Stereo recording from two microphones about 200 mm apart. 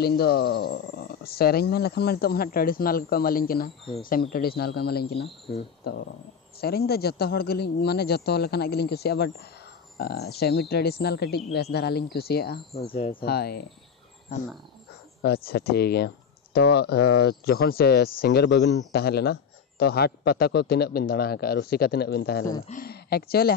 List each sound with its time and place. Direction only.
0.0 s speech: 50° left (ahead or behind)
6.6 s speech: 50° left (ahead or behind)
12.7 s speech: 30° left (ahead or behind)
13.2 s speech: 50° left (ahead or behind)
15.2 s speech: 50° left (ahead or behind)